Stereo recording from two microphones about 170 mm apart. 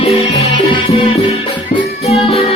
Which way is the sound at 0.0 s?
35° left (ahead or behind).